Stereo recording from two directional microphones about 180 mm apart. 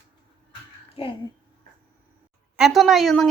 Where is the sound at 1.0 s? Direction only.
30° left (ahead or behind).